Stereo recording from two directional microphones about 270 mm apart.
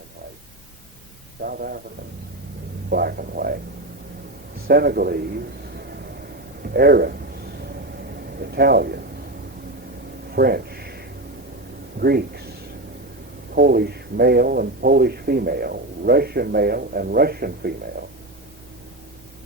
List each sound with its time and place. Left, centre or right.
1.4 s a man's voice: right
2.9 s speech: right
4.7 s a man's voice: right
6.6 s a sound: right
8.2 s speech: right
10.3 s a sound: right
11.9 s speech: right